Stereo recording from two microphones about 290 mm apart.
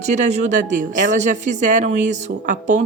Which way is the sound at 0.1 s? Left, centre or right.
Right.